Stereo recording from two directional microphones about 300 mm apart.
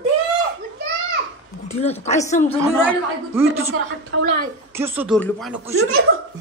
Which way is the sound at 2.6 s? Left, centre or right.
Centre.